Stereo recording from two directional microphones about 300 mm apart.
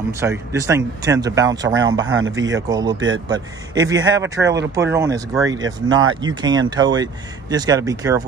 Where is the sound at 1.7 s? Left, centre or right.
Right.